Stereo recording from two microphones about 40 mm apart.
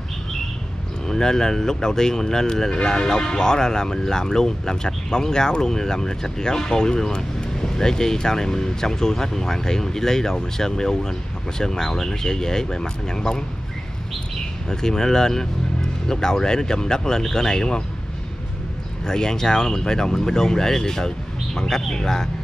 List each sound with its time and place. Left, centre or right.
1.0 s speech: centre
14.7 s speech: centre
19.0 s speech: centre